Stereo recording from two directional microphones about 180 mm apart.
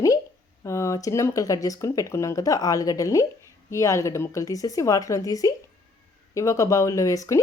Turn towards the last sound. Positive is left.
turn(degrees=20)  # may be behind; listen again after turning